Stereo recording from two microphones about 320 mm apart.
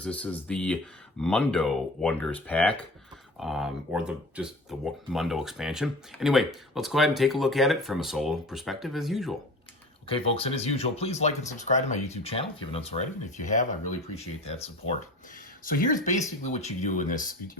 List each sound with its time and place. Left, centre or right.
0.0 s speech: centre
10.1 s speech: centre